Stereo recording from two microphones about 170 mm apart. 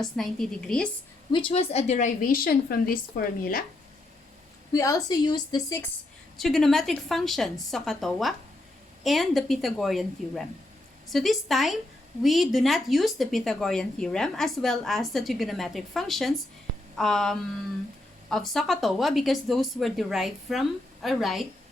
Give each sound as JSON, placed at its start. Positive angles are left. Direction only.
{"t": 0.0, "sound": "a woman's voice", "side_deg": 5}
{"t": 1.3, "sound": "a woman's voice", "side_deg": 30}
{"t": 4.7, "sound": "a woman's voice", "side_deg": 20}
{"t": 6.3, "sound": "a woman's voice", "side_deg": 0}